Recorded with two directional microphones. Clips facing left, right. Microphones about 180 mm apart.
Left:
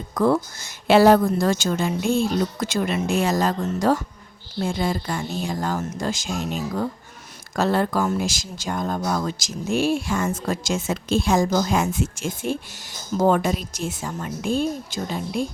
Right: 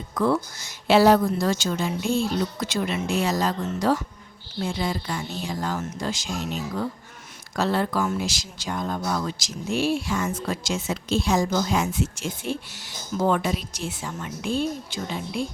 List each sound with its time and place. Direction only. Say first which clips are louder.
0.1 s speech: left 3 dB; 45° left (ahead or behind)